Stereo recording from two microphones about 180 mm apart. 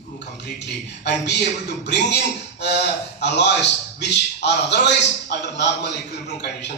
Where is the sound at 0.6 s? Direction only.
70° left (ahead or behind).